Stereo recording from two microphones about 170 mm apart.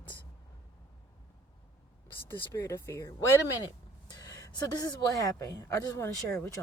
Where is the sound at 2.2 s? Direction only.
15° left (ahead or behind).